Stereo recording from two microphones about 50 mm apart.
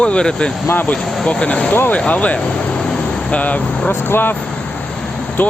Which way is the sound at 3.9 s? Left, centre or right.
Left.